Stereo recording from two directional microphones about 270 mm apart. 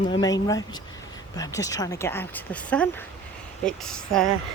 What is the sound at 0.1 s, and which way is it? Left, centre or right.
Speech, centre.